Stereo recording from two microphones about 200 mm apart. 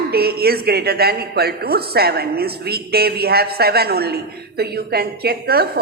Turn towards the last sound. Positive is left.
turn(degrees=-50)  # may be behind; listen again after turning